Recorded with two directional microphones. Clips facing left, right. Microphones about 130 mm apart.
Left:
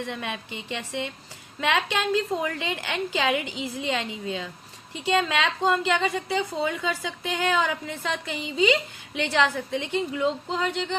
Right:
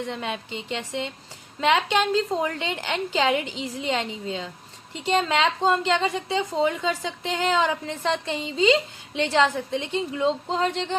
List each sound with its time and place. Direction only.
0.0 s a woman's voice: 25° right (ahead or behind)